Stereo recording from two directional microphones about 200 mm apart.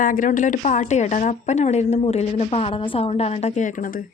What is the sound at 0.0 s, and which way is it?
Speech, 40° left (ahead or behind).